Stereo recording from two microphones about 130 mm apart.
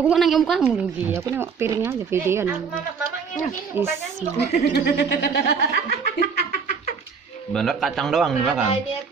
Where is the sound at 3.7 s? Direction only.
15° right (ahead or behind).